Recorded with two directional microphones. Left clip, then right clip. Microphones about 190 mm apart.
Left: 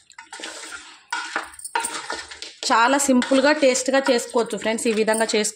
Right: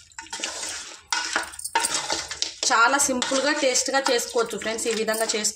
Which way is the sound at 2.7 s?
50° left (ahead or behind).